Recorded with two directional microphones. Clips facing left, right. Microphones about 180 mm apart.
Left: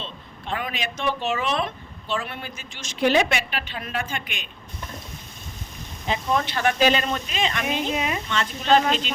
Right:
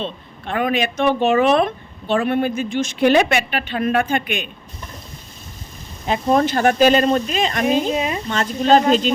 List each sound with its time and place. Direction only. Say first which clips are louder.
0.0 s speech: right 8 dB; 55° right (ahead or behind)
6.1 s speech: right 7 dB; 45° right (ahead or behind)
8.3 s speech: right 6 dB; 40° right (ahead or behind)